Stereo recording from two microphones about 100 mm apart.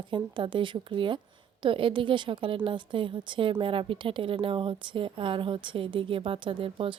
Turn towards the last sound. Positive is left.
turn(degrees=-60)  # may be behind; listen again after turning